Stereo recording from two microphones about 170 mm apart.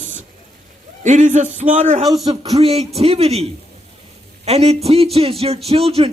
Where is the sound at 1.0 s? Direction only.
45° right (ahead or behind).